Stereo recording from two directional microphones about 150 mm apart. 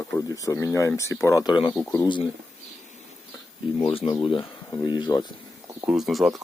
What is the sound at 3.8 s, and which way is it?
Speech, 40° left (ahead or behind).